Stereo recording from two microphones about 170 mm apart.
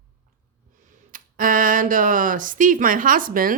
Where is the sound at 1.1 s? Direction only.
55° right (ahead or behind).